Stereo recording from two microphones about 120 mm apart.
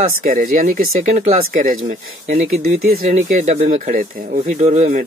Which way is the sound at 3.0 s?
85° right.